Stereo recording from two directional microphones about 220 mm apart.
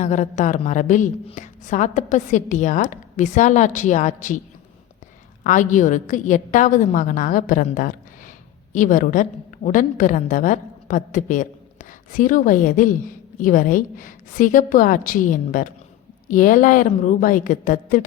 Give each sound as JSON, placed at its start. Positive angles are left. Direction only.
{"t": 0.0, "sound": "a woman's voice", "side_deg": 35}
{"t": 5.4, "sound": "a woman's voice", "side_deg": 35}